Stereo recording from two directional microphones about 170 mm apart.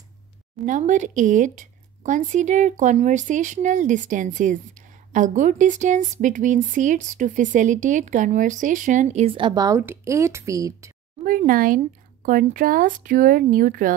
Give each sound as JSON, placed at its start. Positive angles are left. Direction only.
{"t": 0.7, "sound": "speech", "side_deg": -50}
{"t": 11.2, "sound": "speech", "side_deg": -55}